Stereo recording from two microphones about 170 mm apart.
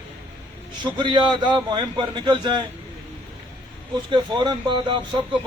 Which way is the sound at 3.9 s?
25° right (ahead or behind).